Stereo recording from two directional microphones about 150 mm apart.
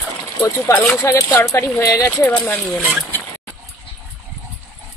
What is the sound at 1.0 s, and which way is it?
Speech, 20° left (ahead or behind).